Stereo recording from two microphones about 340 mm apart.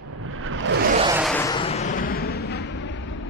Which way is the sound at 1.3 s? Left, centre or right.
Centre.